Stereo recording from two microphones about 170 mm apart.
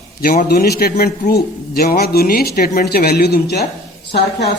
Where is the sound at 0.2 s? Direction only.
55° left (ahead or behind); by 3.7 s 75° left (ahead or behind).